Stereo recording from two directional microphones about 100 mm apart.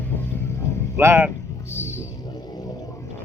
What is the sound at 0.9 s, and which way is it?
Speech, 25° right (ahead or behind).